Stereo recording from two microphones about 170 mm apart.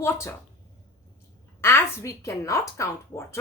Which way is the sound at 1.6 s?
15° left (ahead or behind).